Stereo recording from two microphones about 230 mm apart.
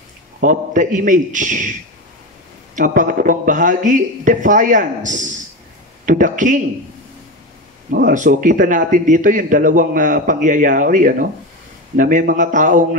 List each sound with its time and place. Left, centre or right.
0.4 s a man's voice: right
8.1 s a man's voice: right